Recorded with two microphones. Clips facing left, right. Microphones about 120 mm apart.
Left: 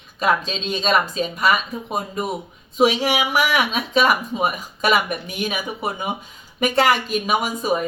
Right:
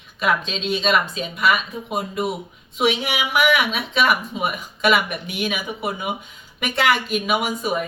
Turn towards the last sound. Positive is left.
turn(degrees=35)  # may be behind; listen again after turning